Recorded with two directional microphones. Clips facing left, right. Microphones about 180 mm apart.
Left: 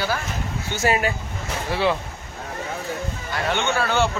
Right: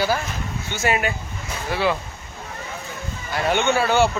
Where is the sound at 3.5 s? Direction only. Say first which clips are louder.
Right 4 dB; 10° right (ahead or behind).